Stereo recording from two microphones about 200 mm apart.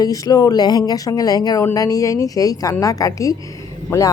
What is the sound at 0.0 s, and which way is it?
Speech, 15° left (ahead or behind).